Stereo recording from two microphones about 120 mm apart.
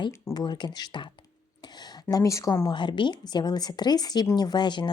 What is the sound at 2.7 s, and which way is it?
A woman's voice, 40° left (ahead or behind).